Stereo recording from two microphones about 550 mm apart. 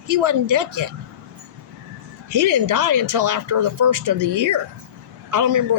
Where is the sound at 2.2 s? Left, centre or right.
Right.